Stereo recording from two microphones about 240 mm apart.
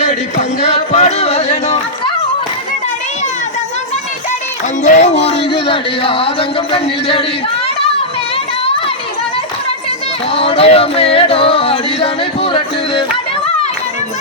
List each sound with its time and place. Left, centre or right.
0.0 s a sound: left
4.8 s music: left
10.3 s music: left